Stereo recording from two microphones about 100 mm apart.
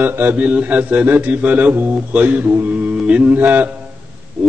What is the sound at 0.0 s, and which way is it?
Speech, 20° right (ahead or behind).